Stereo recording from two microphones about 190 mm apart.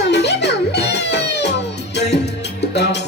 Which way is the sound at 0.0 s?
65° left (ahead or behind).